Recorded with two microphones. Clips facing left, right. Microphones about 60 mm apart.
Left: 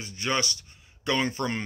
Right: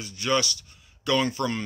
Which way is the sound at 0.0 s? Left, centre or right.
Left.